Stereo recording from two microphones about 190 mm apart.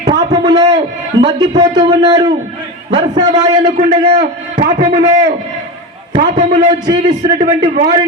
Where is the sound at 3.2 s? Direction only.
20° right (ahead or behind).